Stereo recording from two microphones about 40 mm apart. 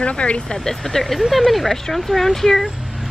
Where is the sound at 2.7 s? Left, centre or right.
Centre.